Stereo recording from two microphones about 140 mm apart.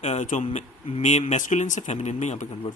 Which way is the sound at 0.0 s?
55° left (ahead or behind).